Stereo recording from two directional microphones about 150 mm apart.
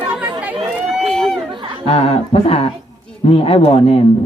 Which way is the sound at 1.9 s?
40° left (ahead or behind).